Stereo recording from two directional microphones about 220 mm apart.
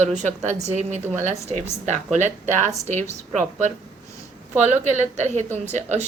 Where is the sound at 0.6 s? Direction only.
30° right (ahead or behind).